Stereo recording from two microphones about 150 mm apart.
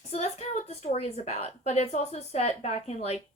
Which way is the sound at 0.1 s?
45° left (ahead or behind).